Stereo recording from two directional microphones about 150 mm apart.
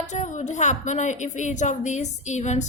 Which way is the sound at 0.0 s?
55° left (ahead or behind).